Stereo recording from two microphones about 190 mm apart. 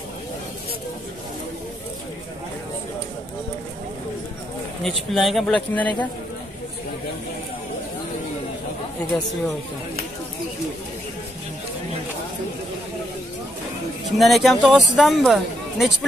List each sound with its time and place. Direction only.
4.8 s speech: centre (ahead or behind)
14.1 s a woman's voice: centre (ahead or behind)